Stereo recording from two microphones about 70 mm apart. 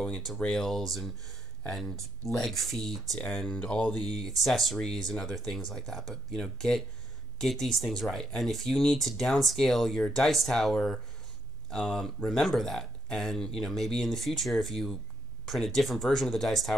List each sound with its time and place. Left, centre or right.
0.0 s speech: centre
3.4 s speech: centre
4.0 s speech: centre